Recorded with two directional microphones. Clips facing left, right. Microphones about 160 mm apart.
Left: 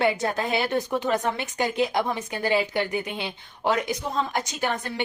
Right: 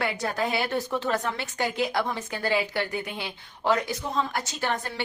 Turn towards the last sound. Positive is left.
turn(degrees=15)  # may be behind; listen again after turning